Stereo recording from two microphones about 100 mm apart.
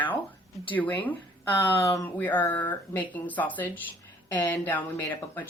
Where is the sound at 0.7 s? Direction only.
15° left (ahead or behind).